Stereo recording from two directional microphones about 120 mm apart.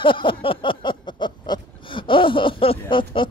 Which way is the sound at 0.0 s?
45° left (ahead or behind).